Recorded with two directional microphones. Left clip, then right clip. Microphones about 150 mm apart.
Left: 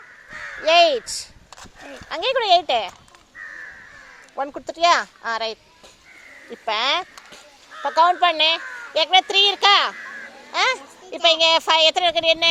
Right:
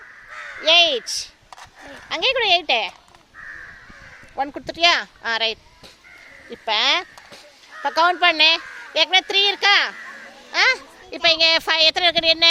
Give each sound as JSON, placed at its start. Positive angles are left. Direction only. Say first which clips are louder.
{"t": 0.6, "sound": "speech", "louder": "even", "side_deg": -15}
{"t": 2.0, "sound": "a child's voice", "louder": "even", "side_deg": -25}
{"t": 4.4, "sound": "a child's voice", "louder": "right 1 dB", "side_deg": -30}
{"t": 7.8, "sound": "a child's voice", "louder": "left 1 dB", "side_deg": -35}